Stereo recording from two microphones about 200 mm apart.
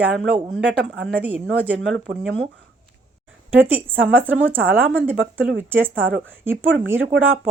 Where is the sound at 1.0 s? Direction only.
10° right (ahead or behind).